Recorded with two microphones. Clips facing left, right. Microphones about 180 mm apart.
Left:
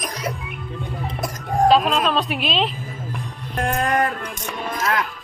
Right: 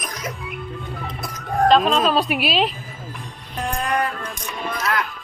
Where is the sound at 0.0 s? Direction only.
30° left (ahead or behind).